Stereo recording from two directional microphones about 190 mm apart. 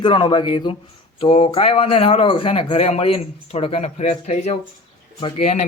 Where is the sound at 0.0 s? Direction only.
25° left (ahead or behind).